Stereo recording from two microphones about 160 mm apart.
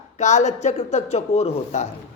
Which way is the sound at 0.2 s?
45° left (ahead or behind).